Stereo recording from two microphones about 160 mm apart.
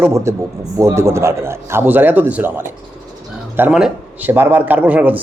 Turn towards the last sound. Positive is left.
turn(degrees=-10)  # may be behind; listen again after turning